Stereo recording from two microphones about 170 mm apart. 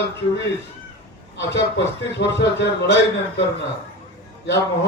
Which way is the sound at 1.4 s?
90° left.